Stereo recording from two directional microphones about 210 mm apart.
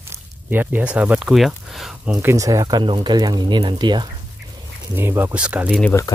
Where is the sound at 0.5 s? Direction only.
10° right (ahead or behind).